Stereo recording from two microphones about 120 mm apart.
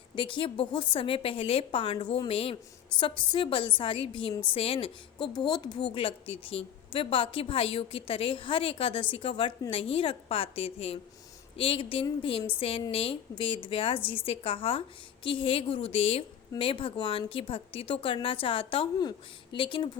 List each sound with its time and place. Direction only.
0.2 s a woman's voice: 45° left (ahead or behind)